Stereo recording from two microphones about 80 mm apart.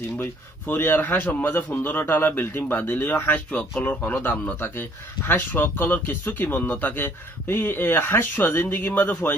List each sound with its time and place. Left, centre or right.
0.2 s a man's voice: left